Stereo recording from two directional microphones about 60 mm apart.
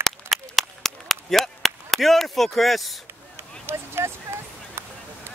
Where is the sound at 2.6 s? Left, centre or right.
Centre.